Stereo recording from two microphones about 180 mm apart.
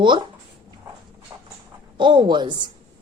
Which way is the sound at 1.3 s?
20° right (ahead or behind).